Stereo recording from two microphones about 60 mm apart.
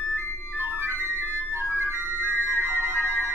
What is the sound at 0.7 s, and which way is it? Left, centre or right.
Music, right.